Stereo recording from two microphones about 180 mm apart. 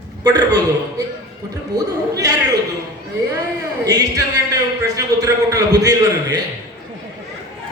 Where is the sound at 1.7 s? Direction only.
20° right (ahead or behind).